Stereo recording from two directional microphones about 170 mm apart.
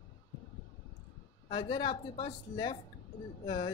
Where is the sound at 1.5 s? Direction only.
25° left (ahead or behind).